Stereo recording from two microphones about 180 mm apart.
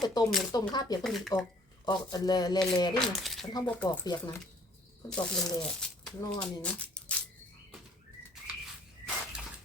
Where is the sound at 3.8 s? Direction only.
20° left (ahead or behind).